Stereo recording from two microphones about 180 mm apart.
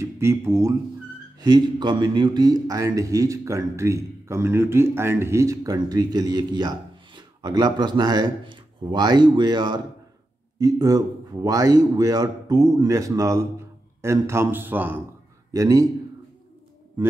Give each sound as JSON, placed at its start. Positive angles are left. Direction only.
{"t": 0.0, "sound": "a man's voice", "side_deg": -15}